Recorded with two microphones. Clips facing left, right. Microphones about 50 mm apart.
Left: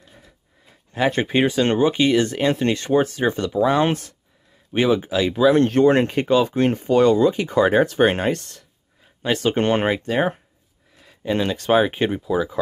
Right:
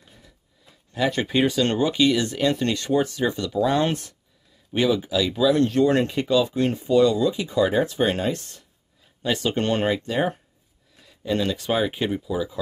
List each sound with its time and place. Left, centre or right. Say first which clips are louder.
0.9 s speech: left 3 dB; left
3.6 s speech: left 3 dB; left
9.0 s speech: left 4 dB; left
11.1 s a sound: left 2 dB; left
11.5 s speech: left 7 dB; left
11.8 s speech: left 4 dB; left